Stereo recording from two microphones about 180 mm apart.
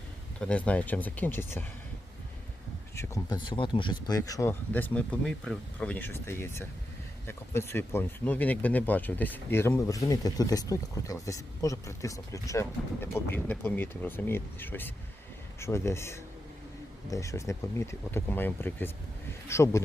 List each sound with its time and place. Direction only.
0.3 s speech: 5° left (ahead or behind)
2.9 s speech: 15° left (ahead or behind)